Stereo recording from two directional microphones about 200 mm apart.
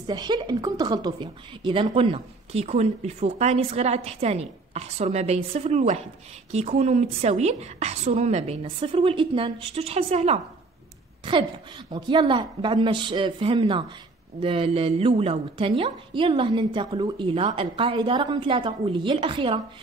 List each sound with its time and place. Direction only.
0.0 s a woman's voice: 20° right (ahead or behind)
11.9 s a woman's voice: 25° right (ahead or behind)